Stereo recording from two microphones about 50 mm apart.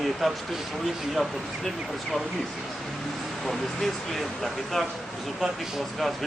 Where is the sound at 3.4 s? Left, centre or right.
Centre.